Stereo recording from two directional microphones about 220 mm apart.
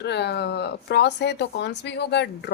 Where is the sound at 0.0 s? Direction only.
50° left (ahead or behind).